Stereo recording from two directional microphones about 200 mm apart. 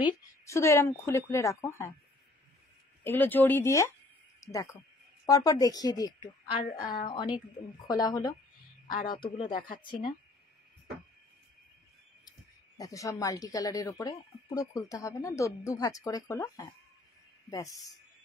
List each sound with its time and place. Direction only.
0.0 s speech: 15° left (ahead or behind)
3.0 s speech: 10° left (ahead or behind)
4.4 s a sound: 15° left (ahead or behind)
5.2 s a woman's voice: 20° left (ahead or behind)
8.8 s a man's voice: 45° left (ahead or behind)
9.1 s a man's voice: 30° left (ahead or behind)
12.3 s speech: 20° left (ahead or behind)